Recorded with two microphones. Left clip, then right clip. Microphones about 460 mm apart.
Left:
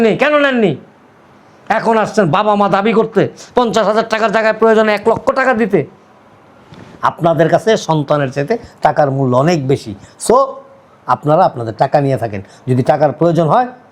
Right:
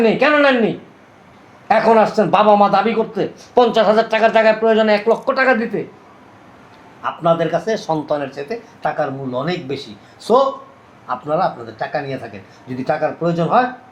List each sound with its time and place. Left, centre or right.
0.0 s speech: left
1.6 s a man's voice: left
7.0 s a man's voice: left
12.6 s speech: left